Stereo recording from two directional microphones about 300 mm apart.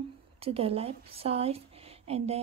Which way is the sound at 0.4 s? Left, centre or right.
Centre.